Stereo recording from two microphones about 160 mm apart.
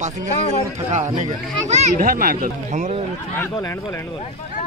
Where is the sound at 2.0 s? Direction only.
60° right (ahead or behind).